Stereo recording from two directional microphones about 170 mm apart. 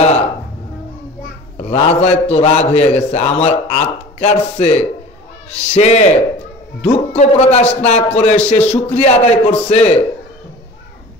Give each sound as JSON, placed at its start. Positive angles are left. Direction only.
{"t": 1.6, "sound": "a man's voice", "side_deg": 40}